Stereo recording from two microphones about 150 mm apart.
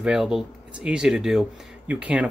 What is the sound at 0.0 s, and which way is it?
Speech, 5° right (ahead or behind).